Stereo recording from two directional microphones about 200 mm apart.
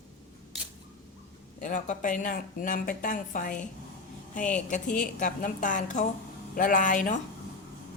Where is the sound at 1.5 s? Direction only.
40° left (ahead or behind).